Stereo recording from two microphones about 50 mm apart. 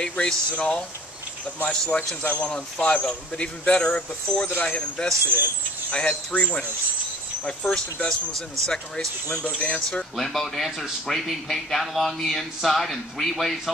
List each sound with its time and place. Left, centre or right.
0.0 s speech: centre
5.2 s speech: right
5.9 s speech: left
7.7 s speech: centre
9.4 s speech: left
10.1 s speech: centre